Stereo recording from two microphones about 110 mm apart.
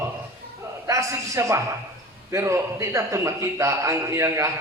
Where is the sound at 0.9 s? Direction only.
30° right (ahead or behind).